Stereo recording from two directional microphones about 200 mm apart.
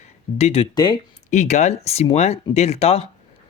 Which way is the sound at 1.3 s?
35° left (ahead or behind).